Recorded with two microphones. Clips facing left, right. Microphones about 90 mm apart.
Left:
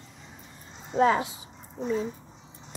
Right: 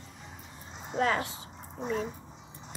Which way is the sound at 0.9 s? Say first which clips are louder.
Left 6 dB; 20° left (ahead or behind).